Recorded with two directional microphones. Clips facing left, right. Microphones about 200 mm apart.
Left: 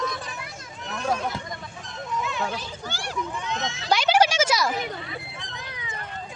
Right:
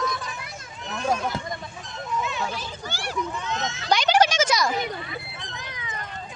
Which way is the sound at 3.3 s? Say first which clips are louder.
Right 1 dB; 15° left (ahead or behind).